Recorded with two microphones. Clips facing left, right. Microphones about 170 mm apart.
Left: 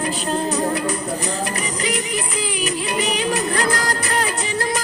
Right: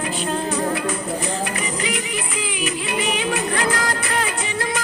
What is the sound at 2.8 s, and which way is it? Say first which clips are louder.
Music: left 1 dB; 40° left (ahead or behind).